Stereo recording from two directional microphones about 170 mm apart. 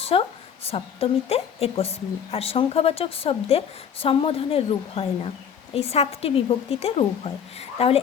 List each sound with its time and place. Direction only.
0.1 s a woman's voice: 30° left (ahead or behind)